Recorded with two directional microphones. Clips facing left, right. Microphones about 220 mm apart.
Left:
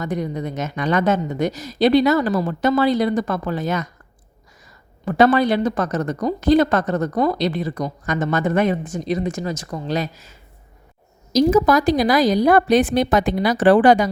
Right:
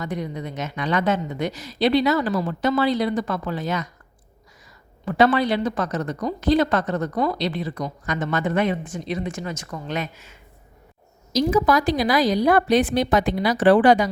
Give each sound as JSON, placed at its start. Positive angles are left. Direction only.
{"t": 0.0, "sound": "a woman's voice", "side_deg": 45}
{"t": 5.0, "sound": "a woman's voice", "side_deg": 45}